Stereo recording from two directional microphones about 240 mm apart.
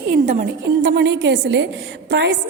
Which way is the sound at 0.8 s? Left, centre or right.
Right.